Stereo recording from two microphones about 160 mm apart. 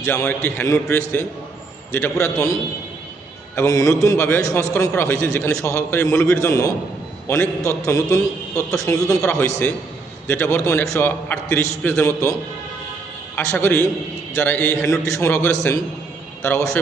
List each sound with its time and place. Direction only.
0.0 s a man's voice: 15° left (ahead or behind)
2.2 s a man's voice: 20° left (ahead or behind)
13.3 s a man's voice: 10° left (ahead or behind)